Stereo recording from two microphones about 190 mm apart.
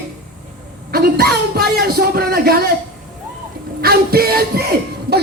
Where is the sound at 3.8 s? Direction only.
55° right (ahead or behind).